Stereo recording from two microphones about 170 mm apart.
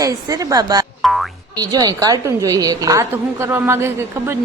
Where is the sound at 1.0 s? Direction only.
Centre (ahead or behind).